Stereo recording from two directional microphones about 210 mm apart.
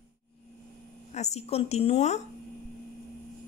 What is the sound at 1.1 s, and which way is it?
A woman's voice, 30° left (ahead or behind).